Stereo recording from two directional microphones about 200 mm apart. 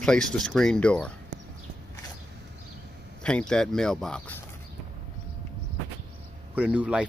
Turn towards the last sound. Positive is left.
turn(degrees=-5)  # may be behind; listen again after turning